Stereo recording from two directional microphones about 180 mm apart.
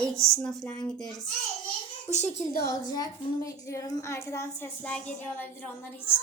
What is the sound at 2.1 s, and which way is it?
Speech, 45° left (ahead or behind).